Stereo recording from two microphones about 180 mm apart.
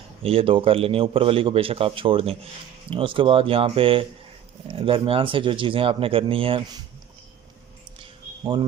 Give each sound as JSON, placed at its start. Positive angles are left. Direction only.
{"t": 0.2, "sound": "a man's voice", "side_deg": -30}